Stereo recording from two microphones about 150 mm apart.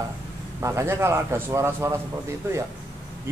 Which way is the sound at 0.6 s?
20° right (ahead or behind).